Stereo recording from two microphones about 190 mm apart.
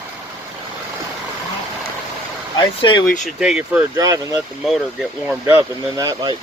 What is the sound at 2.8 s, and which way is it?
Speech, 25° left (ahead or behind).